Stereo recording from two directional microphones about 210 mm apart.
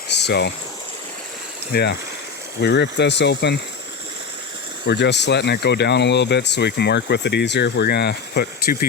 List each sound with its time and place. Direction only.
0.1 s insect: 55° left (ahead or behind)
1.7 s speech: 50° left (ahead or behind)
4.9 s speech: 55° left (ahead or behind)